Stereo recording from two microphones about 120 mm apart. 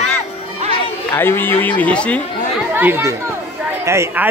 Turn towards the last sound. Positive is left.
turn(degrees=-20)  # may be behind; listen again after turning